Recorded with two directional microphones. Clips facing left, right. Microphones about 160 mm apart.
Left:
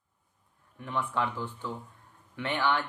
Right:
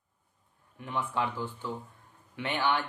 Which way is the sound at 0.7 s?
15° right (ahead or behind).